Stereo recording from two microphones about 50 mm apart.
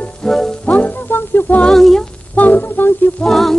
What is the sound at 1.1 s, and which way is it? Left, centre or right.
Music, left.